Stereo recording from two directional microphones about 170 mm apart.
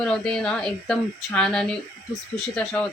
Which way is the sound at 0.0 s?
5° left (ahead or behind).